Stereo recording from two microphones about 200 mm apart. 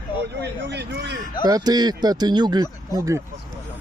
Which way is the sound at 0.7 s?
55° right (ahead or behind).